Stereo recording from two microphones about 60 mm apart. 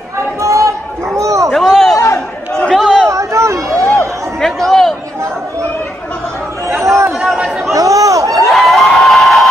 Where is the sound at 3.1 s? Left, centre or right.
Right.